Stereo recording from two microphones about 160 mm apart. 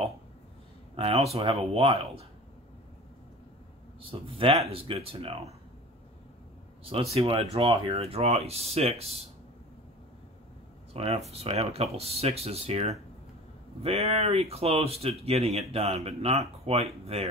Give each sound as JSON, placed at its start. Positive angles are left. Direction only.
{"t": 0.9, "sound": "speech", "side_deg": -40}
{"t": 4.0, "sound": "speech", "side_deg": -35}
{"t": 6.8, "sound": "speech", "side_deg": -35}
{"t": 10.9, "sound": "speech", "side_deg": -40}